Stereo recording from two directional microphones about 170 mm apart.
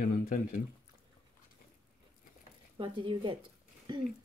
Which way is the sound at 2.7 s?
30° right (ahead or behind).